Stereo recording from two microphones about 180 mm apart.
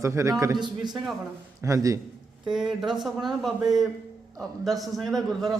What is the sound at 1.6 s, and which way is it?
Speech, 20° right (ahead or behind).